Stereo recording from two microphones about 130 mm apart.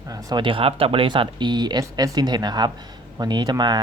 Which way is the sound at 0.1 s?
30° right (ahead or behind).